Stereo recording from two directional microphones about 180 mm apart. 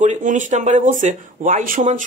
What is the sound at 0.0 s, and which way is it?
Speech, 45° right (ahead or behind).